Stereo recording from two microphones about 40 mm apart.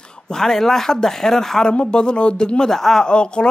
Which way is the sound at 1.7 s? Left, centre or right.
Left.